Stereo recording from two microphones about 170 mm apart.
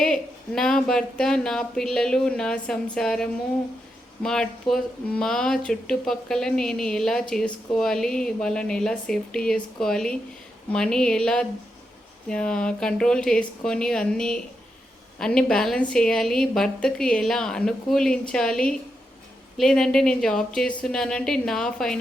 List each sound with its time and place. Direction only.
0.0 s speech: 5° left (ahead or behind)